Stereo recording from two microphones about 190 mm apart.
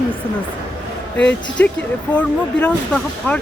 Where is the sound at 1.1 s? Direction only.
5° left (ahead or behind).